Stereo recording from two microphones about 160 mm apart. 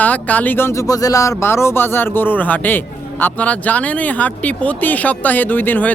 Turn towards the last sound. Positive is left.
turn(degrees=10)  # may be behind; listen again after turning